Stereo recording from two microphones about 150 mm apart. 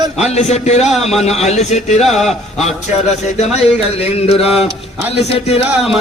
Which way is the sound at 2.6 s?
45° left (ahead or behind).